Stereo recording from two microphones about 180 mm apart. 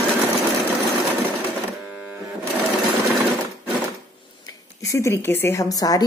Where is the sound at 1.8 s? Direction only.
10° right (ahead or behind).